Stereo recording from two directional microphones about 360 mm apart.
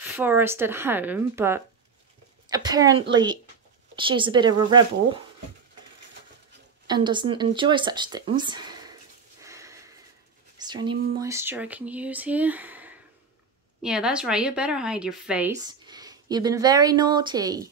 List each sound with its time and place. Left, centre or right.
0.0 s a sound: centre
2.5 s speech: centre
6.9 s speech: centre
9.4 s sniff: centre
10.6 s a sound: centre
13.8 s speech: centre